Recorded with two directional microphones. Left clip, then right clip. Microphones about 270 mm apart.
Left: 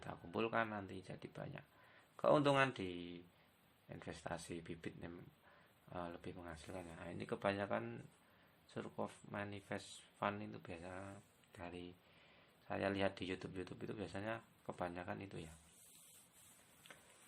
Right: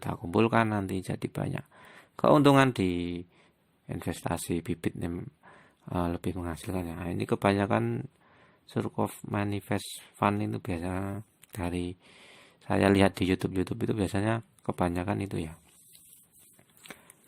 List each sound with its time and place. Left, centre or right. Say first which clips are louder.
0.0 s speech: right 16 dB; right